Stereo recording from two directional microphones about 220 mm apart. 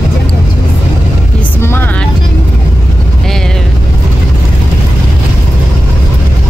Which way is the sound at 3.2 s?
Centre (ahead or behind).